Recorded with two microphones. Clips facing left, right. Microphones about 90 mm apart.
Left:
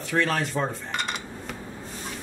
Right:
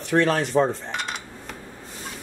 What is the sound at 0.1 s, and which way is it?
Speech, 30° right (ahead or behind).